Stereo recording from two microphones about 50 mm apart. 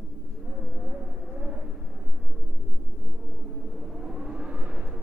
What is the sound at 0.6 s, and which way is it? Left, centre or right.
Vehicle, centre.